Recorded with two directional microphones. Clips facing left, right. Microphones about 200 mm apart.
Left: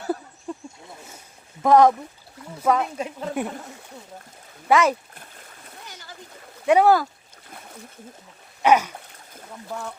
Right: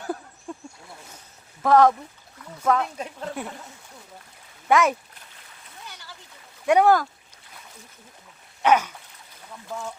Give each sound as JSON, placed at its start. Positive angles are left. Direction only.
{"t": 0.0, "sound": "a sound", "side_deg": 5}
{"t": 1.6, "sound": "speech", "side_deg": 15}
{"t": 4.7, "sound": "speech", "side_deg": 0}
{"t": 5.1, "sound": "boat", "side_deg": 50}
{"t": 6.7, "sound": "speech", "side_deg": 5}
{"t": 8.6, "sound": "speech", "side_deg": 10}
{"t": 8.9, "sound": "boat", "side_deg": 55}